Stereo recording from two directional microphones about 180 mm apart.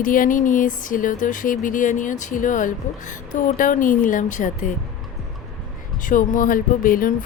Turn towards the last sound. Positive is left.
turn(degrees=50)  # may be behind; listen again after turning